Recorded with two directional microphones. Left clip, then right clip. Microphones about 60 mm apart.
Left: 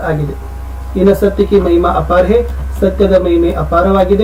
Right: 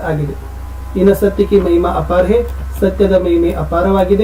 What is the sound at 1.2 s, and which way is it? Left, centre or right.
Speech, centre.